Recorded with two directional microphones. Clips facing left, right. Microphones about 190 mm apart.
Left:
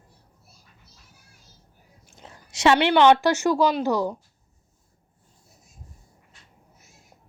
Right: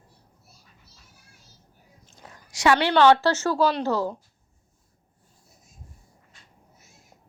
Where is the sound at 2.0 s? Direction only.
20° left (ahead or behind).